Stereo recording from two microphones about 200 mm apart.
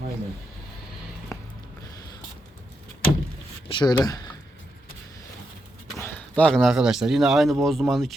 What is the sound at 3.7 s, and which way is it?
Speech, 20° left (ahead or behind).